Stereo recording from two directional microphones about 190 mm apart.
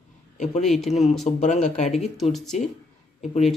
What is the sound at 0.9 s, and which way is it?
Speech, 35° left (ahead or behind).